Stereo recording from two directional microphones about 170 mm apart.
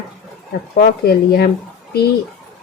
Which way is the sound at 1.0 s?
70° left (ahead or behind).